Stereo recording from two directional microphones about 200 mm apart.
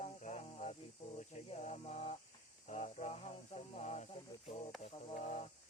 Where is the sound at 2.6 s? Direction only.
35° left (ahead or behind).